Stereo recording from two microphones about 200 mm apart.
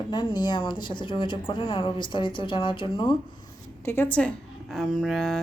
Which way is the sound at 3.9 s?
10° left (ahead or behind).